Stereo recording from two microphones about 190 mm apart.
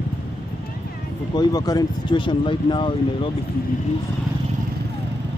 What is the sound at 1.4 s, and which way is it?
Speech, 20° left (ahead or behind).